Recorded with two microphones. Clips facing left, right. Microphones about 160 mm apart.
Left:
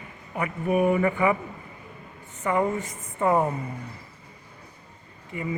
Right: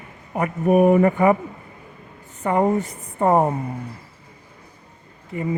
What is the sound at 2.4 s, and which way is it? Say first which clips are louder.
A man's voice: right 5 dB; 35° right (ahead or behind).